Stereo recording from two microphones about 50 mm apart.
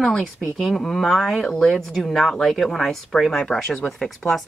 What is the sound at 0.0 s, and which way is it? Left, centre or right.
Speech, centre.